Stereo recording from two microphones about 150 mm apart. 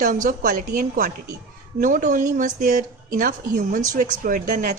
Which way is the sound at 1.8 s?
55° right (ahead or behind).